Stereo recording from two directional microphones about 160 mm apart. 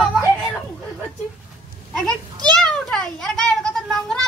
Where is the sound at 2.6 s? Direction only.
5° left (ahead or behind).